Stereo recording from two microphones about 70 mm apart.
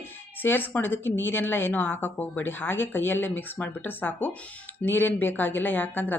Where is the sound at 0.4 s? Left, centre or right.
Left.